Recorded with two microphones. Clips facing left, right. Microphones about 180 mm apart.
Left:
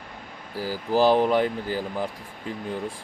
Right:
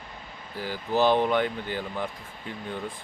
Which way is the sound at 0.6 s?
35° left (ahead or behind).